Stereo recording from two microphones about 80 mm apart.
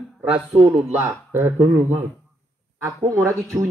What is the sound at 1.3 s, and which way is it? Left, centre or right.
Speech, right.